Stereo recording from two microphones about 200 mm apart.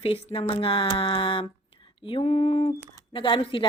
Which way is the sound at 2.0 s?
30° left (ahead or behind).